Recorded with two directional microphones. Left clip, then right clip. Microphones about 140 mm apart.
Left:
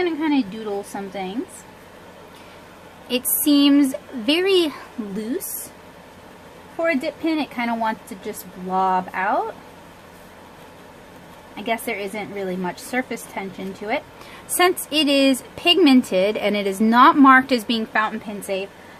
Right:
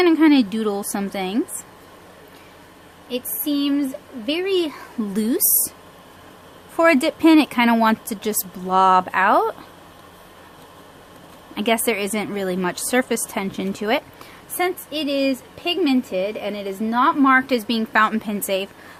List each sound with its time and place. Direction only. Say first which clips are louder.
0.0 s a woman's voice: right 6 dB; 80° right
3.1 s a woman's voice: left 5 dB; 10° left (ahead or behind)
6.7 s speech: right 6 dB; 60° right (ahead or behind)
11.5 s speech: right 5 dB; 55° right (ahead or behind)
14.6 s a woman's voice: left 5 dB; 10° left (ahead or behind); by 17.7 s 5° right (ahead or behind)
17.9 s a woman's voice: right 6 dB; 40° right (ahead or behind)